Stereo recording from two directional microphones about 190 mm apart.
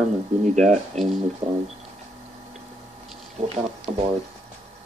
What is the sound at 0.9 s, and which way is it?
Speech, 35° right (ahead or behind).